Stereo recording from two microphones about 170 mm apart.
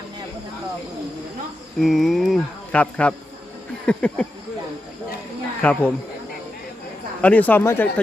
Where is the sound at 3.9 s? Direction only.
5° left (ahead or behind).